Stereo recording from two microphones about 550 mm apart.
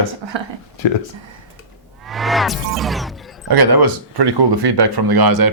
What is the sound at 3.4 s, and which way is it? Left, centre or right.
Speech, right.